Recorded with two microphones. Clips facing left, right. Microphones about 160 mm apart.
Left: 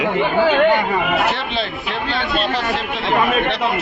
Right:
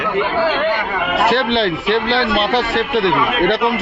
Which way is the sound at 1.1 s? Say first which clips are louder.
Right 5 dB; 70° right (ahead or behind).